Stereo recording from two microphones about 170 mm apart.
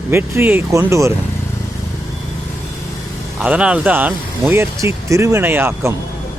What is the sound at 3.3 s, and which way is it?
Speech, 5° right (ahead or behind).